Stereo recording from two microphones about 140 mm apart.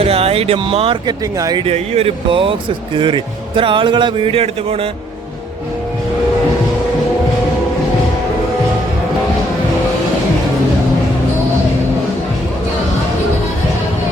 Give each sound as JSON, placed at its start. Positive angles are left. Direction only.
{"t": 0.0, "sound": "speech", "side_deg": -45}
{"t": 1.0, "sound": "speech", "side_deg": -30}
{"t": 1.6, "sound": "speech", "side_deg": -45}